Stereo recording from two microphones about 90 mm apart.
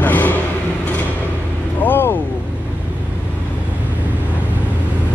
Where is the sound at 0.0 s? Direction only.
20° left (ahead or behind).